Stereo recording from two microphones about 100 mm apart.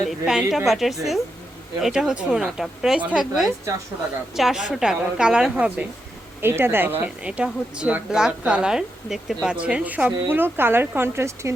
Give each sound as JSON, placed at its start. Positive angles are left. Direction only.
{"t": 0.1, "sound": "speech", "side_deg": -5}
{"t": 4.4, "sound": "a woman's voice", "side_deg": 0}
{"t": 6.4, "sound": "speech", "side_deg": -25}
{"t": 7.3, "sound": "a woman's voice", "side_deg": -10}